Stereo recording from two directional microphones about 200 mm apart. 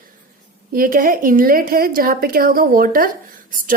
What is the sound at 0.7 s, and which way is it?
A woman's voice, 45° right (ahead or behind).